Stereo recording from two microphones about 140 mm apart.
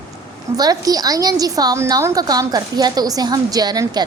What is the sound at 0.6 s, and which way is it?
A woman's voice, 25° right (ahead or behind).